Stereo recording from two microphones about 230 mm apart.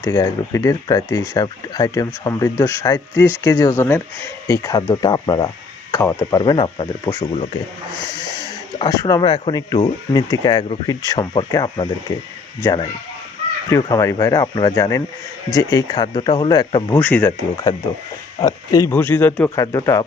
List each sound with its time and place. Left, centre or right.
0.0 s speech: centre
8.8 s speech: centre
16.9 s speech: centre